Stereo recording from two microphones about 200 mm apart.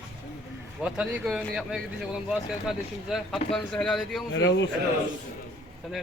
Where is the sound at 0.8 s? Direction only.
5° right (ahead or behind).